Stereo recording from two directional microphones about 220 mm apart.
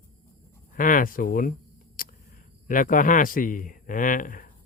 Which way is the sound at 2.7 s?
35° left (ahead or behind).